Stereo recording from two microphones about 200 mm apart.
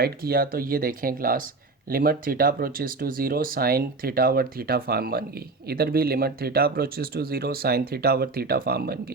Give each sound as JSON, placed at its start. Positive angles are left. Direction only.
{"t": 0.0, "sound": "speech", "side_deg": -50}